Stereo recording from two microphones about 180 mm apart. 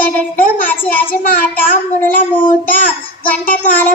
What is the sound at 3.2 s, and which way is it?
Child singing, 50° left (ahead or behind).